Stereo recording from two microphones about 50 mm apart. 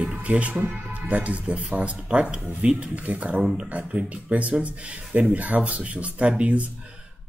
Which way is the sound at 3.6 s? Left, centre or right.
Right.